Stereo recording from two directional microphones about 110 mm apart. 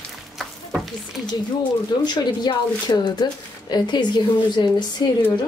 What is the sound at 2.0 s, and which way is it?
A woman's voice, 40° left (ahead or behind).